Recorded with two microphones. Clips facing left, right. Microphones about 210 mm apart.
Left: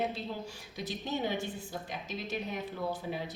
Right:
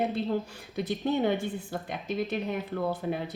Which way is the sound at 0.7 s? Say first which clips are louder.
Right 8 dB; 55° right (ahead or behind).